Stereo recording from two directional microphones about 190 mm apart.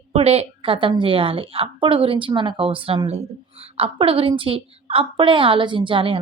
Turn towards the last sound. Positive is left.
turn(degrees=-25)  # may be behind; listen again after turning